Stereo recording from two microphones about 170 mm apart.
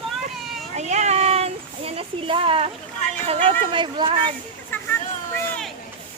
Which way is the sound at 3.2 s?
35° right (ahead or behind).